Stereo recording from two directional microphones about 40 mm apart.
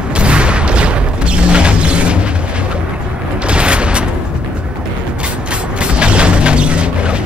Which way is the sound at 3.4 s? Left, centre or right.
Right.